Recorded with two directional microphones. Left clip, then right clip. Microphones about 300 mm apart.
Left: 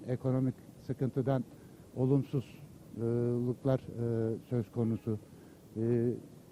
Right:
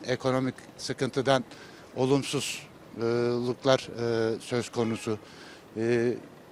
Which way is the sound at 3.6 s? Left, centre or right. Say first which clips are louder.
Right 12 dB; centre.